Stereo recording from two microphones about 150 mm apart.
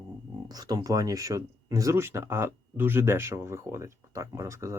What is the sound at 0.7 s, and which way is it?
Speech, 25° right (ahead or behind).